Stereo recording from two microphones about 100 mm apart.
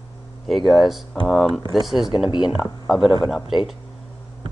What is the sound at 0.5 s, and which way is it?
Speech, centre (ahead or behind).